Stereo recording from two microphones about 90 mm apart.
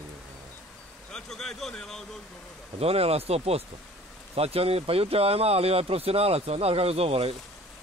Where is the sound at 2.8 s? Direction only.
90° right.